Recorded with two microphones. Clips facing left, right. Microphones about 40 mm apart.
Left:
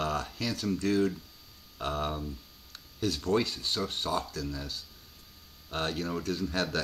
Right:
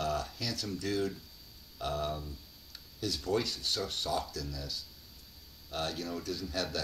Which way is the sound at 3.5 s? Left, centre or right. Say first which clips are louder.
Left 3 dB; left.